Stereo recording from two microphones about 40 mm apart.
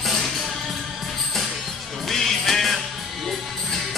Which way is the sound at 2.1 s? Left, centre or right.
Centre.